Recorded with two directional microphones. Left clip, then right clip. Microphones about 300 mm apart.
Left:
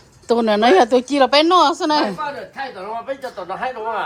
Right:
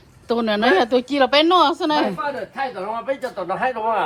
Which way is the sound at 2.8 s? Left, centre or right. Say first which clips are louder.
Right 2 dB; right.